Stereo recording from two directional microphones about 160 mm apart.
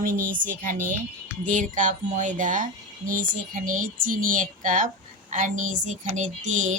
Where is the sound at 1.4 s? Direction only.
55° right (ahead or behind).